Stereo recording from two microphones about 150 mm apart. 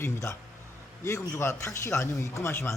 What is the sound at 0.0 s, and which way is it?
Speech, 20° left (ahead or behind).